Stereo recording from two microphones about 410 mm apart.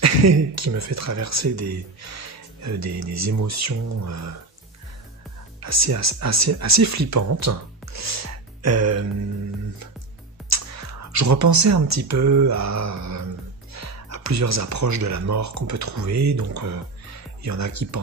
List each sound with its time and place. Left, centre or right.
0.0 s speech: right
5.6 s speech: right
10.5 s speech: right